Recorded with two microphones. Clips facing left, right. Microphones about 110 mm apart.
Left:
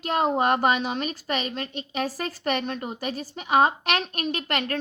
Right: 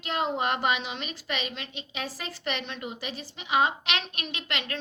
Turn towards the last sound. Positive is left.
turn(degrees=45)  # may be behind; listen again after turning